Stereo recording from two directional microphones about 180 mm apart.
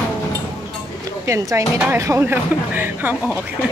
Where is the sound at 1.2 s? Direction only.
15° right (ahead or behind).